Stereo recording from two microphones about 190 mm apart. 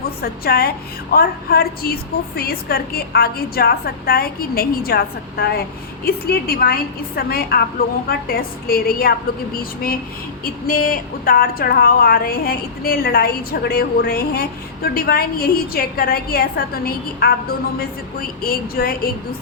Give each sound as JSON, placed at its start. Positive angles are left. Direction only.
{"t": 0.2, "sound": "a woman's voice", "side_deg": 55}
{"t": 10.4, "sound": "a woman's voice", "side_deg": 50}